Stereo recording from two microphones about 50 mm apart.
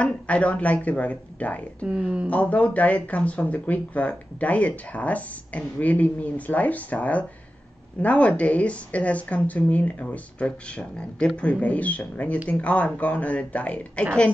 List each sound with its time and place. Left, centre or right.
0.0 s speech: left